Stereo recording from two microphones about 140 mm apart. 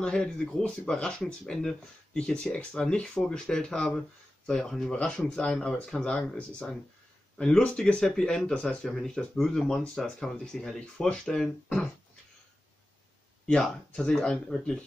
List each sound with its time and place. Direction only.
0.0 s speech: 5° left (ahead or behind)
13.5 s speech: 5° left (ahead or behind)